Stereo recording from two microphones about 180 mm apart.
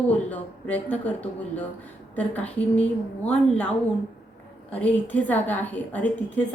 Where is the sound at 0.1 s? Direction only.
10° left (ahead or behind).